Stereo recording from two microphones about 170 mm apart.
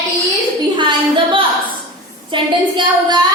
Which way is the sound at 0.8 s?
30° right (ahead or behind).